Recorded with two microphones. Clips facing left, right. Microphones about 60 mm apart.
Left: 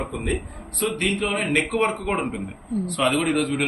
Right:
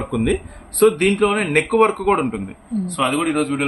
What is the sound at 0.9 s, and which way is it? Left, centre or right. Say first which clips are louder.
Speech: right 7 dB; right.